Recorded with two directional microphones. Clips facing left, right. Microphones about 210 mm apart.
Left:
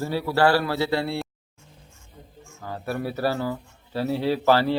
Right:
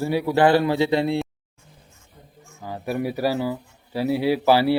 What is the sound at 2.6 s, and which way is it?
Speech, 15° right (ahead or behind).